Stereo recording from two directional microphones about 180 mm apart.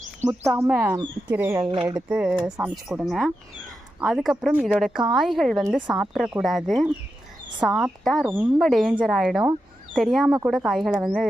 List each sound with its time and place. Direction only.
0.2 s speech: 10° right (ahead or behind)
1.5 s speech: 25° right (ahead or behind)
1.9 s speech: 10° right (ahead or behind)
8.3 s speech: 10° right (ahead or behind)
8.6 s speech: centre (ahead or behind)